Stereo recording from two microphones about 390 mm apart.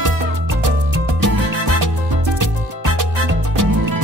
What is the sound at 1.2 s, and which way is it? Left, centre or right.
Music, right.